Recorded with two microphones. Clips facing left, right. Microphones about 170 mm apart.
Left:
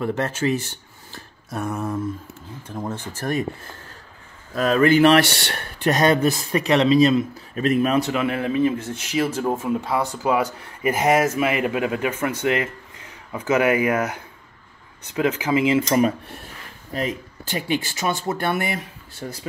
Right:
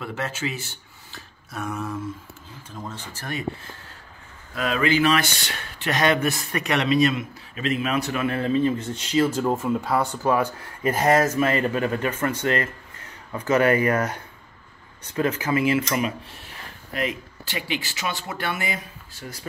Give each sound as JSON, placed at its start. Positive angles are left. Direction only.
{"t": 1.5, "sound": "a man's voice", "side_deg": 40}
{"t": 2.7, "sound": "speech", "side_deg": 55}
{"t": 4.6, "sound": "a man's voice", "side_deg": 40}
{"t": 4.9, "sound": "speech", "side_deg": 65}
{"t": 5.9, "sound": "a man's voice", "side_deg": 40}
{"t": 7.5, "sound": "speech", "side_deg": 45}
{"t": 8.1, "sound": "speech", "side_deg": 20}
{"t": 10.2, "sound": "speech", "side_deg": 10}
{"t": 16.9, "sound": "speech", "side_deg": 40}